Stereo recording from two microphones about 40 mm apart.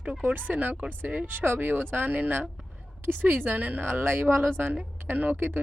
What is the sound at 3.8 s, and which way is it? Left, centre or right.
Speech, right.